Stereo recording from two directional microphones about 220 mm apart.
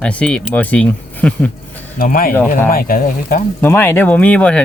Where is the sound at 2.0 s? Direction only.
40° left (ahead or behind).